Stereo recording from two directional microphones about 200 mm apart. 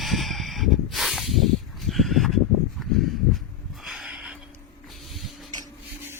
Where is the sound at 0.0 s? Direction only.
Centre (ahead or behind).